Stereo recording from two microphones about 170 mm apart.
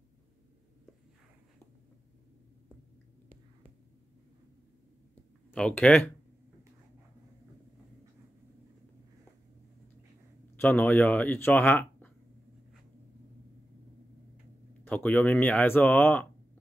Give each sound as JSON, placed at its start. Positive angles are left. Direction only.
{"t": 5.5, "sound": "speech", "side_deg": 5}
{"t": 10.5, "sound": "speech", "side_deg": 10}
{"t": 14.9, "sound": "speech", "side_deg": 10}